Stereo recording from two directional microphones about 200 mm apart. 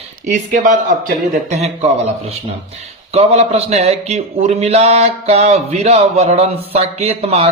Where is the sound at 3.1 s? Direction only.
30° right (ahead or behind).